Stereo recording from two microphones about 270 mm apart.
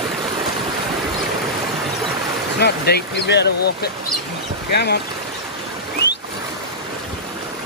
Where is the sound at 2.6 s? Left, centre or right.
Left.